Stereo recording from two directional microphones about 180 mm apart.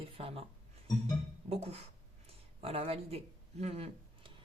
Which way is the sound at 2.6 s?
35° right (ahead or behind).